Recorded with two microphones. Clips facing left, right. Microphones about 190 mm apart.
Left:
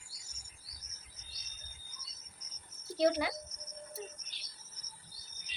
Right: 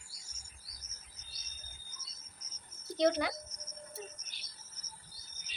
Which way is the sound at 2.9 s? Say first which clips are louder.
Even; 5° left (ahead or behind).